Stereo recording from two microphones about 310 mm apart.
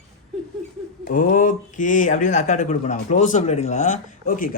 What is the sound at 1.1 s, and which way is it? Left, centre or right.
Speech, left.